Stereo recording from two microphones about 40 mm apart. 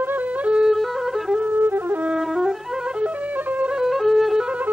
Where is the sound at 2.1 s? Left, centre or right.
Centre.